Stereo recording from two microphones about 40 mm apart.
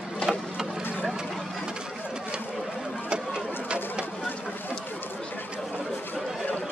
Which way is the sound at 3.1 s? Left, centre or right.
Right.